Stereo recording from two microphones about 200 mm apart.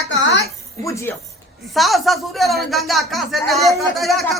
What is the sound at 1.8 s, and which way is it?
Speech, centre (ahead or behind).